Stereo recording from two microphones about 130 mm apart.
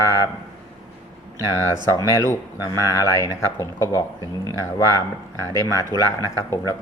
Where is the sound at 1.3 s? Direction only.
25° left (ahead or behind).